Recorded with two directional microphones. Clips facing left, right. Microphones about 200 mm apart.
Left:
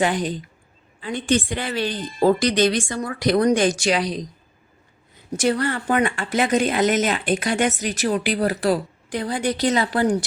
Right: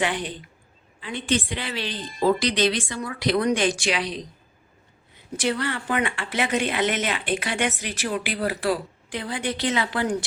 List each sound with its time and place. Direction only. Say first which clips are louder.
0.0 s speech: left 5 dB; 40° left (ahead or behind)
5.4 s speech: left 5 dB; 45° left (ahead or behind)